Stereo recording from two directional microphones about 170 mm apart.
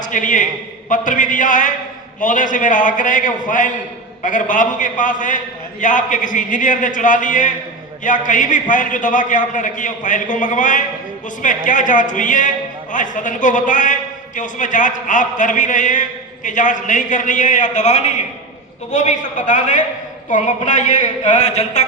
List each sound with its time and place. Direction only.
0.0 s a man's voice: 50° left (ahead or behind)